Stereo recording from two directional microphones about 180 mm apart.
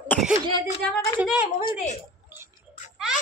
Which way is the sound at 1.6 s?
40° left (ahead or behind).